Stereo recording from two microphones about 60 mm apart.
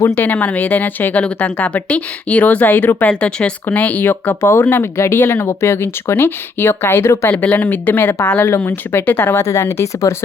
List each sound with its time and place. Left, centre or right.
0.1 s speech: left
4.1 s speech: left
7.3 s speech: left
9.4 s speech: left